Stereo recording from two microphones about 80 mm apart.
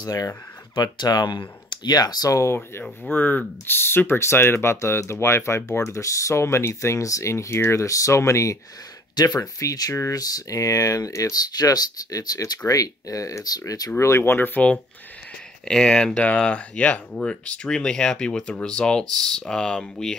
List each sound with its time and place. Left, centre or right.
0.0 s speech: left
0.7 s speech: left
3.1 s speech: left
9.1 s speech: left
13.9 s speech: left; by 14.8 s centre
15.6 s speech: centre